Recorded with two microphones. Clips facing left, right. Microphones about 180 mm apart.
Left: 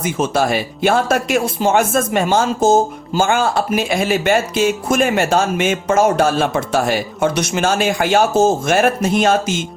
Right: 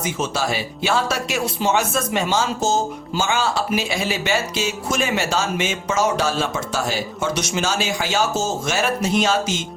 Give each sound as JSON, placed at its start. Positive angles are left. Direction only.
{"t": 0.0, "sound": "speech", "side_deg": 55}